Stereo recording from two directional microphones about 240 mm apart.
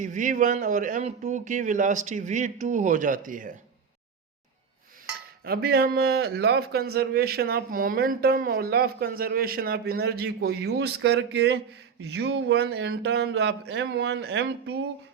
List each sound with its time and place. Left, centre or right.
0.0 s a man's voice: right
5.5 s a man's voice: right